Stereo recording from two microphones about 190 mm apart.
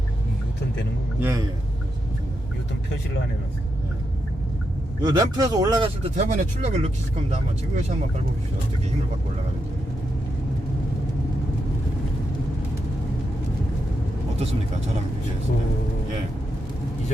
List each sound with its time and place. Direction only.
1.2 s a man's voice: 15° right (ahead or behind)
5.0 s speech: 20° right (ahead or behind)